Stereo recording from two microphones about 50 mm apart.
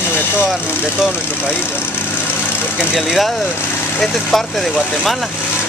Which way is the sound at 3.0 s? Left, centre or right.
Centre.